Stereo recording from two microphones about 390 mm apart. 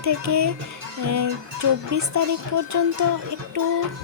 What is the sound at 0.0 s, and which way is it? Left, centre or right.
Speech, right.